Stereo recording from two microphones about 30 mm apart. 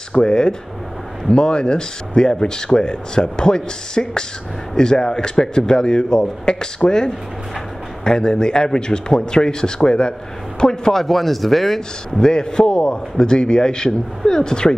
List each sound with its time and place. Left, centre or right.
0.1 s speech: left
8.0 s speech: left
10.9 s speech: centre
12.2 s speech: left
12.7 s speech: left
13.2 s speech: left